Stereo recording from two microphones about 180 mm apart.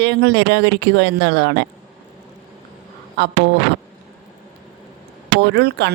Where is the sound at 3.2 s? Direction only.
70° right (ahead or behind).